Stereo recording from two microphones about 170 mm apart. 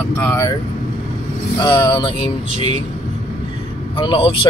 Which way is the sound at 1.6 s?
25° left (ahead or behind).